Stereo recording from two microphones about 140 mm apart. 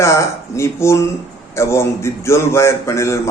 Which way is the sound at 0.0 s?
20° left (ahead or behind).